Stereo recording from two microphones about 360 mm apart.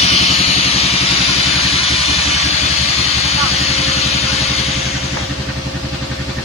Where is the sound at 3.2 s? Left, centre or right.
Centre.